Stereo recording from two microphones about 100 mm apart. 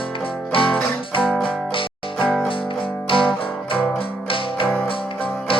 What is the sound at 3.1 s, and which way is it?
Music, 65° left (ahead or behind).